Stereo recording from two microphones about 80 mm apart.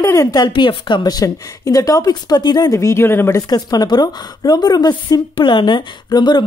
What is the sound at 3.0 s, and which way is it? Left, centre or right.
Speech, left.